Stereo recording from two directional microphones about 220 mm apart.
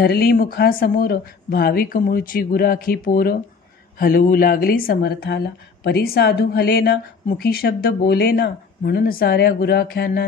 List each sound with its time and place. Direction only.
0.0 s a woman's voice: 45° left (ahead or behind)